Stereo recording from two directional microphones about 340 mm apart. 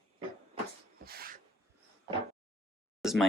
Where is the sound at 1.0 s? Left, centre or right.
Right.